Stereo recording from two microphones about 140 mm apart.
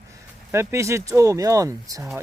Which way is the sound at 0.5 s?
20° right (ahead or behind).